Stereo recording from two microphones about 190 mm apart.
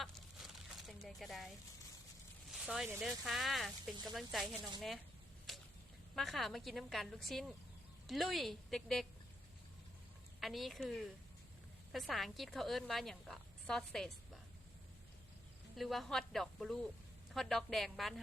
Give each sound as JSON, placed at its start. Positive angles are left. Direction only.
{"t": 0.0, "sound": "a sound", "side_deg": 0}
{"t": 2.5, "sound": "a woman's voice", "side_deg": 0}
{"t": 6.1, "sound": "a woman's voice", "side_deg": 0}
{"t": 10.4, "sound": "a woman's voice", "side_deg": 0}
{"t": 15.7, "sound": "a woman's voice", "side_deg": 0}